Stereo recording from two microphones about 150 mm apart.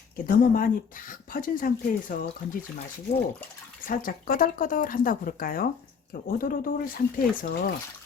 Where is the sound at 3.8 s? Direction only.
70° left (ahead or behind).